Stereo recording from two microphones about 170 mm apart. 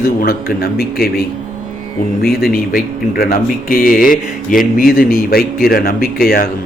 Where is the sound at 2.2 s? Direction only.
60° left (ahead or behind).